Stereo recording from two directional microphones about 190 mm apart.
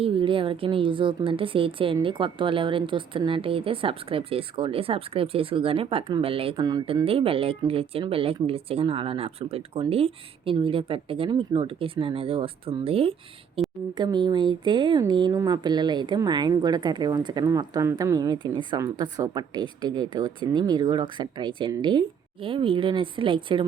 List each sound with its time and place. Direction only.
0.0 s a woman's voice: 25° right (ahead or behind)
13.6 s a sound: 30° right (ahead or behind)
13.9 s a woman's voice: 25° right (ahead or behind)